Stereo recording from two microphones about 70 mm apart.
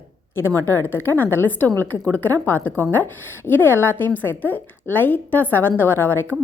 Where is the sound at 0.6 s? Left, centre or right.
Left.